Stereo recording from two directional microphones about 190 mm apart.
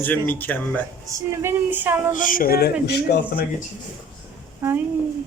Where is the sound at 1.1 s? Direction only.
15° right (ahead or behind).